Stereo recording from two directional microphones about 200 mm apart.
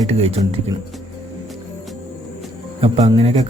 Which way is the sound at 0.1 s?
30° right (ahead or behind).